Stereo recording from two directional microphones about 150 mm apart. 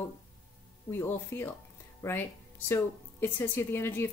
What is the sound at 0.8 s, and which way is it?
Speech, 15° left (ahead or behind).